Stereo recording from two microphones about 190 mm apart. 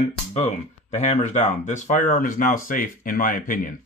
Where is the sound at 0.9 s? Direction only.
40° left (ahead or behind).